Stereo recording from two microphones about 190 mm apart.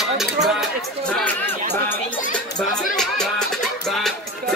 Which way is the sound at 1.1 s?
10° left (ahead or behind).